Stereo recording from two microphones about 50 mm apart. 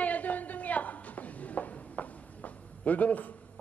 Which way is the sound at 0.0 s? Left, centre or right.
Left.